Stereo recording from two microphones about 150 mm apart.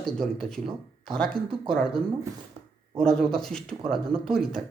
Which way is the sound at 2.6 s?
45° right (ahead or behind).